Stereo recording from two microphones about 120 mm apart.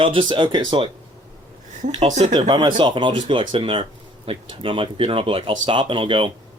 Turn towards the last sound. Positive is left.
turn(degrees=-45)  # may be behind; listen again after turning